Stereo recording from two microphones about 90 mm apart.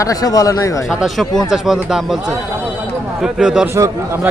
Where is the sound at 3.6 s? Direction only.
35° right (ahead or behind).